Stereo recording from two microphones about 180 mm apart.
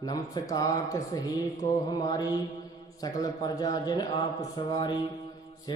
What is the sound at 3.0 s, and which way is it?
A man's voice, 20° left (ahead or behind).